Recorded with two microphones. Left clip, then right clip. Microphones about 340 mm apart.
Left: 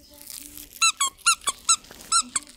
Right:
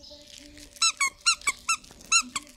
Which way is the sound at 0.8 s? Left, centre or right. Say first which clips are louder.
Left 3 dB; centre.